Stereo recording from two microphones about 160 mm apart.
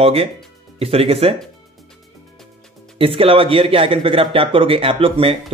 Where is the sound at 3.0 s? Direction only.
35° right (ahead or behind).